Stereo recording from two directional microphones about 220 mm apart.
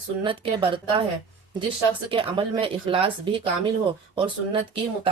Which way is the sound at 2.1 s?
25° right (ahead or behind).